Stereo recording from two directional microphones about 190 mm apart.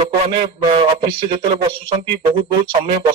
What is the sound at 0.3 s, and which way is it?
A man's voice, 25° right (ahead or behind).